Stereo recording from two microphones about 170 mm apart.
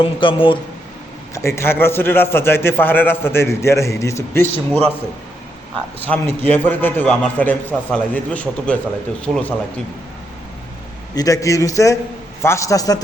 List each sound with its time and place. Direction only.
0.0 s a man's voice: 30° left (ahead or behind)
1.3 s a man's voice: 15° left (ahead or behind)
6.1 s a man's voice: 10° left (ahead or behind)
11.1 s a man's voice: 20° left (ahead or behind)